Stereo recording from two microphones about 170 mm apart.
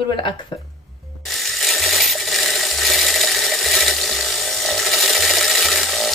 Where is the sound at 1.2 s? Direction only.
Centre (ahead or behind).